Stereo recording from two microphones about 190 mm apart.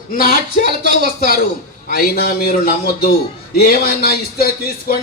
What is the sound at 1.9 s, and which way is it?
A man's voice, 50° left (ahead or behind).